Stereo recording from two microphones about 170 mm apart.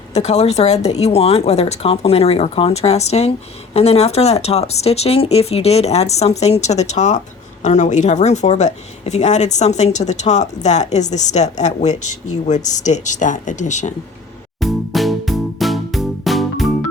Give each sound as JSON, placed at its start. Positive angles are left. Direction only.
{"t": 0.1, "sound": "speech", "side_deg": 40}
{"t": 14.6, "sound": "music", "side_deg": 0}